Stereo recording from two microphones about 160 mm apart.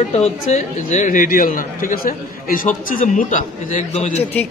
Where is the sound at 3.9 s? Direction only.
40° left (ahead or behind).